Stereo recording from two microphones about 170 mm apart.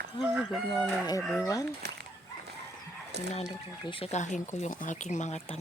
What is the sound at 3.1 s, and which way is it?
Speech, 80° right.